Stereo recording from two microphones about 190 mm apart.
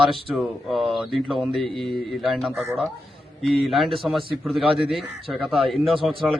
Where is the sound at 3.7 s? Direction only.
Centre (ahead or behind).